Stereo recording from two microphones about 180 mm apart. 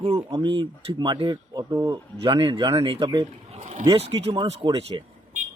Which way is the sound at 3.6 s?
40° right (ahead or behind).